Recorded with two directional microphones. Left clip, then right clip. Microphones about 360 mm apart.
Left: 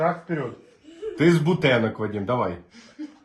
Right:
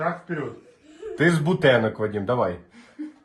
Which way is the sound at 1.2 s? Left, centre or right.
Centre.